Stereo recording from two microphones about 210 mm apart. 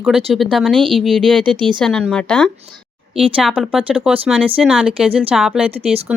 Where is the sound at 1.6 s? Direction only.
20° right (ahead or behind).